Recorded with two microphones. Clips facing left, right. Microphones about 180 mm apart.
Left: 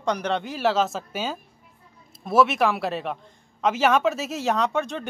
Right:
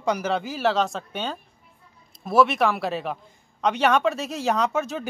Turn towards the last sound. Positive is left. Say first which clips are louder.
# even
turn(degrees=-5)  # may be behind; listen again after turning